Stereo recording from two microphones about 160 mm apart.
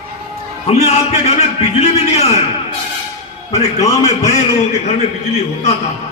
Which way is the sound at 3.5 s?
45° left (ahead or behind).